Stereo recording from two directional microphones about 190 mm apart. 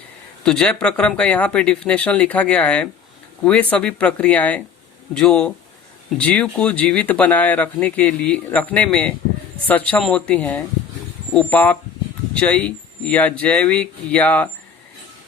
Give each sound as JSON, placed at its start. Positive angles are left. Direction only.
{"t": 0.4, "sound": "speech", "side_deg": 5}